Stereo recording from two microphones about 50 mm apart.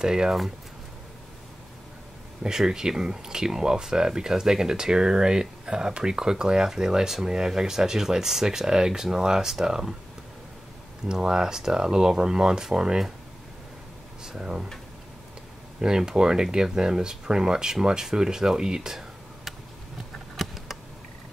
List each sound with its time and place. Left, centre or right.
0.0 s speech: centre
2.4 s speech: centre
11.1 s speech: centre
14.2 s speech: centre
15.8 s speech: centre
20.3 s a sound: centre